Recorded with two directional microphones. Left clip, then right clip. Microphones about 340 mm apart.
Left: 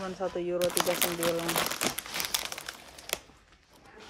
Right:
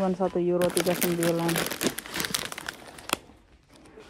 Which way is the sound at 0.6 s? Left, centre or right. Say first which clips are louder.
Right 3 dB; centre.